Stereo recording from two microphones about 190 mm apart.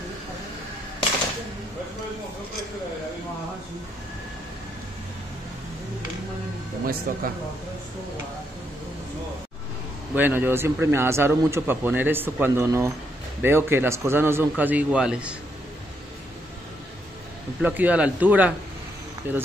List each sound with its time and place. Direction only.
7.1 s speech: 50° right (ahead or behind)
10.1 s a man's voice: 10° right (ahead or behind)
17.6 s a man's voice: 10° right (ahead or behind)